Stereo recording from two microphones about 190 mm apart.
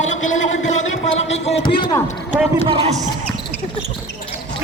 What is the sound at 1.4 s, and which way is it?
Speech, 25° left (ahead or behind).